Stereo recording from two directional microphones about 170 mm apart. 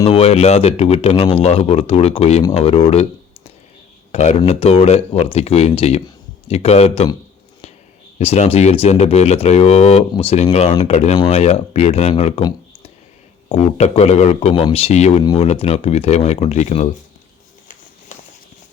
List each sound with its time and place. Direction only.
0.0 s speech: 35° left (ahead or behind)
8.2 s speech: 35° left (ahead or behind)
13.5 s speech: 40° left (ahead or behind)